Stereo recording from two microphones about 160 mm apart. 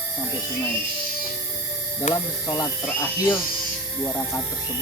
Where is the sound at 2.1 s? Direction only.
50° left (ahead or behind).